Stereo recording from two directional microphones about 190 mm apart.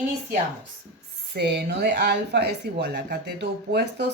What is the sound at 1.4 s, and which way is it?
Speech, 60° right (ahead or behind).